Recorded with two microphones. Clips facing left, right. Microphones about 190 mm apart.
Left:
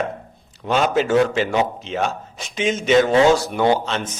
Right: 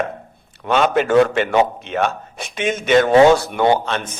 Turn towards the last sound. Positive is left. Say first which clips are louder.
# right 2 dB
turn(degrees=-55)  # may be behind; listen again after turning